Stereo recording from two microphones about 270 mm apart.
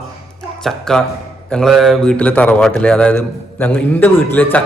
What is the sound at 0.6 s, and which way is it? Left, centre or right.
A man's voice, centre.